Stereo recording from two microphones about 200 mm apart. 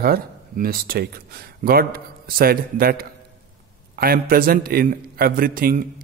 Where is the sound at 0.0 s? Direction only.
50° right (ahead or behind).